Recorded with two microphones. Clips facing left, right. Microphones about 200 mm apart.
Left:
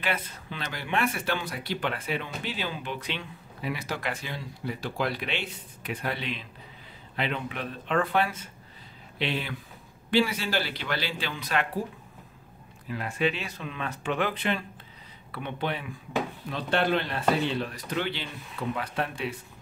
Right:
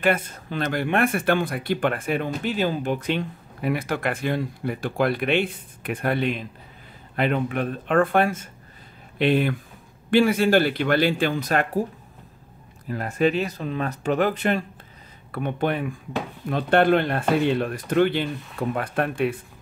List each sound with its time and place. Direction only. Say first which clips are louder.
0.0 s speech: right 9 dB; 50° right (ahead or behind)
12.8 s speech: right 6 dB; 45° right (ahead or behind)